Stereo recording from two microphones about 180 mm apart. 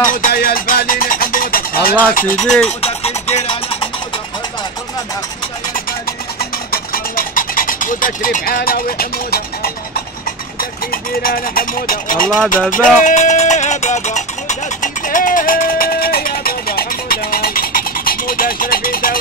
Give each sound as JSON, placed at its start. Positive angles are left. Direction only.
{"t": 0.0, "sound": "music", "side_deg": 50}
{"t": 2.1, "sound": "a sound", "side_deg": 50}
{"t": 2.8, "sound": "music", "side_deg": 35}
{"t": 6.7, "sound": "a sound", "side_deg": 55}
{"t": 10.6, "sound": "speech", "side_deg": 55}
{"t": 12.7, "sound": "music", "side_deg": 45}